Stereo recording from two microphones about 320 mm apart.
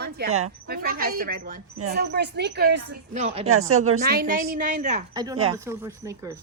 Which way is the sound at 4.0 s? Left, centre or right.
Right.